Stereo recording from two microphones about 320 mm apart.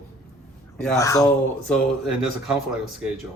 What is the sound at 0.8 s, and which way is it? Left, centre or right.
A man's voice, centre.